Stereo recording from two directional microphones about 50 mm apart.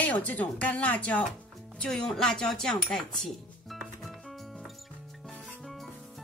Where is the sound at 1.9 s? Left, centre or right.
Centre.